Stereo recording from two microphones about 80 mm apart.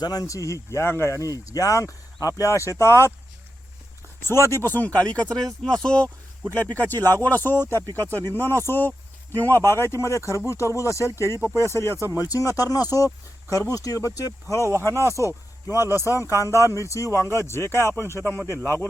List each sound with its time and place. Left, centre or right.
0.0 s speech: left
4.2 s speech: left
12.1 s speech: left
15.7 s a man's voice: right
16.0 s speech: left